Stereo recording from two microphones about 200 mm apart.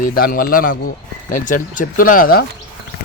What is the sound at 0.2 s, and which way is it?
Speech, 45° left (ahead or behind).